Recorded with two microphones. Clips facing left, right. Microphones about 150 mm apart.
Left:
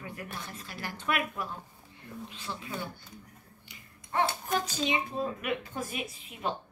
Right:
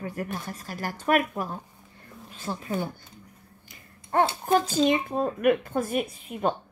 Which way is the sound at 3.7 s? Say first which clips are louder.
Right 7 dB; 50° right (ahead or behind).